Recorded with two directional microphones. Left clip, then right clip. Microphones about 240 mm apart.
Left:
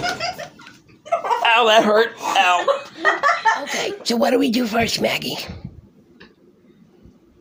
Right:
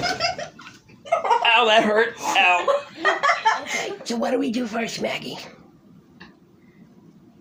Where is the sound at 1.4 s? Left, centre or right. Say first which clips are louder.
Left 5 dB; left.